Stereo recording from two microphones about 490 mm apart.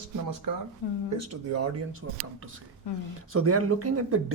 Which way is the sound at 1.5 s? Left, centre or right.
Right.